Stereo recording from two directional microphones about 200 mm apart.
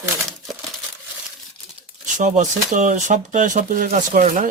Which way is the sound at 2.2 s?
40° right (ahead or behind).